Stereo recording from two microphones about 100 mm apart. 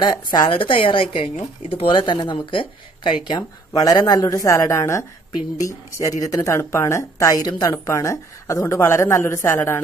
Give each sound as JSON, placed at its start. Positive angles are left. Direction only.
{"t": 0.0, "sound": "a woman's voice", "side_deg": 45}
{"t": 0.5, "sound": "speech", "side_deg": 60}
{"t": 3.3, "sound": "speech", "side_deg": 45}